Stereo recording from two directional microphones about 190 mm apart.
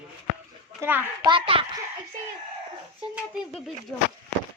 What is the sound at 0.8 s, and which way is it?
Speech, 10° right (ahead or behind).